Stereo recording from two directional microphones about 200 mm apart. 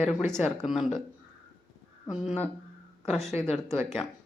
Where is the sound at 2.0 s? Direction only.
Centre (ahead or behind).